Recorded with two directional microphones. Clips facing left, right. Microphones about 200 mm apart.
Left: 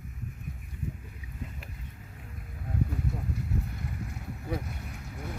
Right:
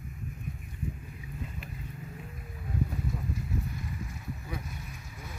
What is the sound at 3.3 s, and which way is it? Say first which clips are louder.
Vehicle: left 1 dB; 60° left (ahead or behind).